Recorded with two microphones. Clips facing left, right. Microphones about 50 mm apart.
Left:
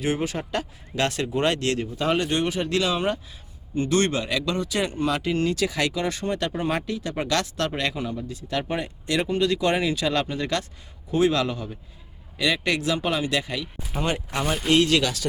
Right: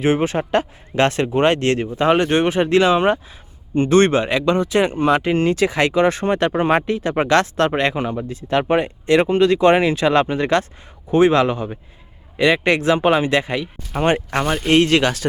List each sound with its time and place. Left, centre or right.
0.0 s speech: right
14.4 s speech: centre
14.7 s speech: right